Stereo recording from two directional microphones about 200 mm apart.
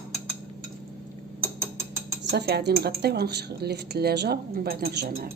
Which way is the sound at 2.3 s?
55° right (ahead or behind).